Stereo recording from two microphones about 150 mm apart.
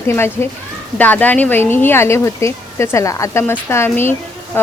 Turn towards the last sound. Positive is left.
turn(degrees=15)  # may be behind; listen again after turning